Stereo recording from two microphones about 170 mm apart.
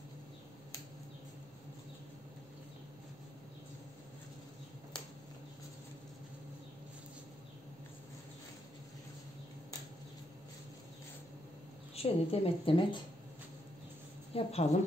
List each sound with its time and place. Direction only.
11.9 s a woman's voice: 35° left (ahead or behind)
14.3 s a woman's voice: 40° left (ahead or behind)